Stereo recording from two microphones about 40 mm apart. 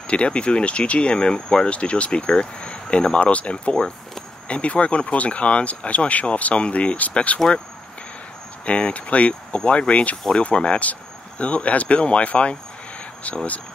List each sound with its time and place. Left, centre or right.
0.0 s speech: left
8.6 s speech: left